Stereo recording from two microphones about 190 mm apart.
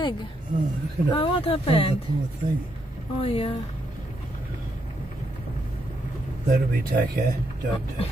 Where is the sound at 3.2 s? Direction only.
30° left (ahead or behind).